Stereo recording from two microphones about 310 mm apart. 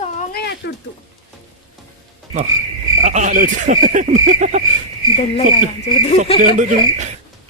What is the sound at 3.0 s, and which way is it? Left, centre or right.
Speech, right.